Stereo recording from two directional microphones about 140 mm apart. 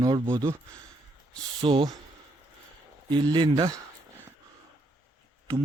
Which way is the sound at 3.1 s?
35° right (ahead or behind).